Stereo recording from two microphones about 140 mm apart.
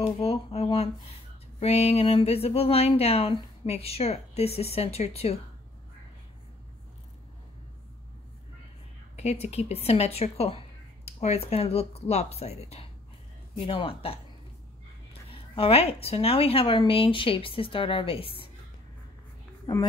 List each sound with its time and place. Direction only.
0.0 s speech: 45° left (ahead or behind)
9.1 s a woman's voice: 50° left (ahead or behind)
15.3 s a woman's voice: 40° left (ahead or behind)
19.6 s speech: 35° left (ahead or behind)